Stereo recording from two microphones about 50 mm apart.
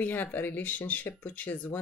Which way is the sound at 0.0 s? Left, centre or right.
Left.